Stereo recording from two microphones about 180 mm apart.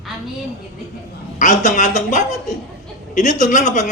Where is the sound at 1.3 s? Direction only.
45° left (ahead or behind).